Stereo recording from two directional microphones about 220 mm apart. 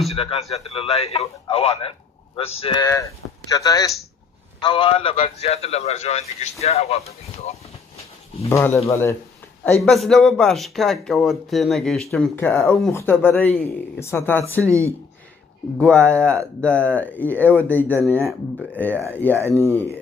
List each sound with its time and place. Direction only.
0.1 s a man's voice: 25° left (ahead or behind)
8.4 s speech: 15° left (ahead or behind)
9.8 s speech: centre (ahead or behind)
12.5 s speech: 15° left (ahead or behind)
14.6 s speech: 15° right (ahead or behind)
15.8 s speech: 5° left (ahead or behind)
19.4 s speech: 10° right (ahead or behind)